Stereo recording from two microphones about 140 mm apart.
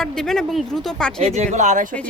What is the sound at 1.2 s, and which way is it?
Speech, 50° right (ahead or behind).